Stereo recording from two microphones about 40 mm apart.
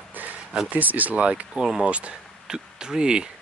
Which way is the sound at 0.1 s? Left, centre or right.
Right.